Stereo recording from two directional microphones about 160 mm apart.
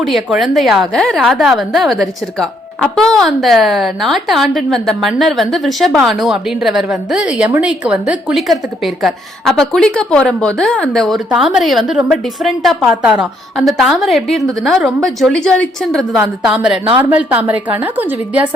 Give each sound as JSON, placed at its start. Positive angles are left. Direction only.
{"t": 0.1, "sound": "a woman's voice", "side_deg": 0}
{"t": 16.7, "sound": "speech", "side_deg": -35}
{"t": 17.0, "sound": "a woman's voice", "side_deg": -10}